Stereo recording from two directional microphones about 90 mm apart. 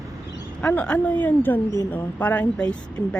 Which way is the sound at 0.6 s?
15° left (ahead or behind).